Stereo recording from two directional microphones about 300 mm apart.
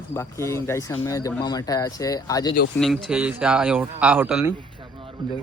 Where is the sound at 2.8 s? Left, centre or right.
Centre.